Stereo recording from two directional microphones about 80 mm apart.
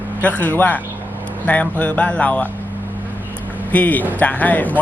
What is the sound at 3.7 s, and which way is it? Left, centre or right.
Speech, left.